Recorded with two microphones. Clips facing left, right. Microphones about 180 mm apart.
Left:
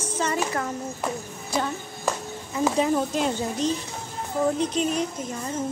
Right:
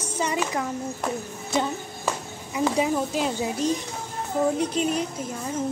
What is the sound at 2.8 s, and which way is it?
Speech, 5° right (ahead or behind).